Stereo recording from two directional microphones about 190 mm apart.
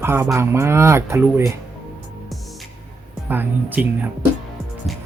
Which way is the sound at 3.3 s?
10° right (ahead or behind).